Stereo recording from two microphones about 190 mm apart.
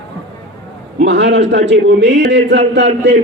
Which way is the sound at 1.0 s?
70° right (ahead or behind).